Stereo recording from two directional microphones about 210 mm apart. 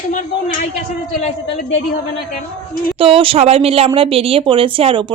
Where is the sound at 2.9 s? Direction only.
25° right (ahead or behind).